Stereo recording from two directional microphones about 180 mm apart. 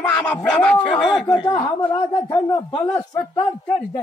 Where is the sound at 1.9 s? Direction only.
25° left (ahead or behind).